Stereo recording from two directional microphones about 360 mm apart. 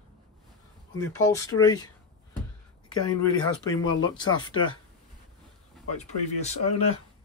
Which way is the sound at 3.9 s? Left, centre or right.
Centre.